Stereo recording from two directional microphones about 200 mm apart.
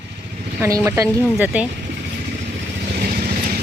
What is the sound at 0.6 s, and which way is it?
Speech, 10° right (ahead or behind).